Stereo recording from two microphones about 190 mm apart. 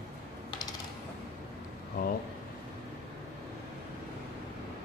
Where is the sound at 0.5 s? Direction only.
20° left (ahead or behind).